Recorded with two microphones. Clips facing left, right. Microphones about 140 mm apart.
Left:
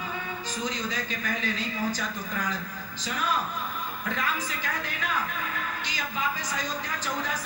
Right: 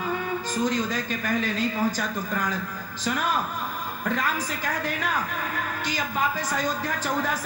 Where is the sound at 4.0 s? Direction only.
45° right (ahead or behind).